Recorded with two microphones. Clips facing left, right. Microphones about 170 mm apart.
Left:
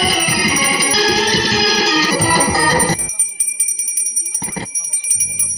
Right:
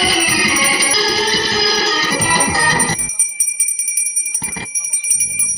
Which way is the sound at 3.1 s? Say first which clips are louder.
Left 1 dB; 15° right (ahead or behind).